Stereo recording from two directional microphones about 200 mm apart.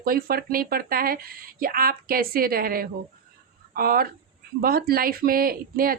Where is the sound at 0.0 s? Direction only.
50° right (ahead or behind).